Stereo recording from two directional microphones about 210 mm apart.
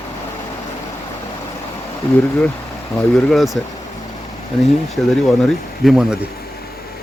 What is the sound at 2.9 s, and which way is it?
Speech, centre (ahead or behind).